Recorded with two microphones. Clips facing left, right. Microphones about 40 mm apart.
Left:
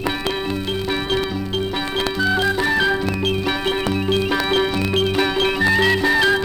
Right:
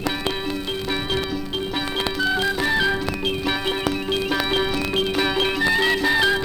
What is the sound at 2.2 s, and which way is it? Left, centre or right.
Music, centre.